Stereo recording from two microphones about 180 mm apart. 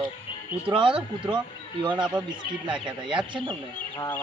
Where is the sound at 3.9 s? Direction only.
15° left (ahead or behind).